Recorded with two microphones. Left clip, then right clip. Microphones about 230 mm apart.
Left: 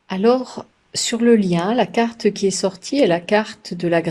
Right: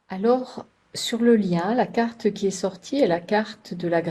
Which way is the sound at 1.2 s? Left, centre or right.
Left.